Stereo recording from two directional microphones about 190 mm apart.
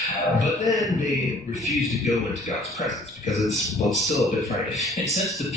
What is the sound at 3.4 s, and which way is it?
A man's voice, centre (ahead or behind).